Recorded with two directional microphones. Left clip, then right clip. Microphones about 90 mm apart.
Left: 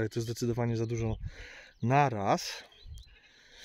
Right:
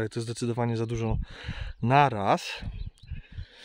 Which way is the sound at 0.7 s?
50° right (ahead or behind).